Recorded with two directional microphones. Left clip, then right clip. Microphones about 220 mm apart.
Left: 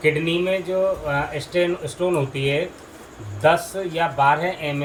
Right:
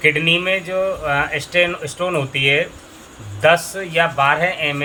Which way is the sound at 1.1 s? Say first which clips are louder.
Right 5 dB; 10° right (ahead or behind).